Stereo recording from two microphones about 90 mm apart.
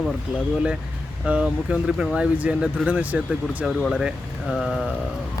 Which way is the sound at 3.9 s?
5° right (ahead or behind).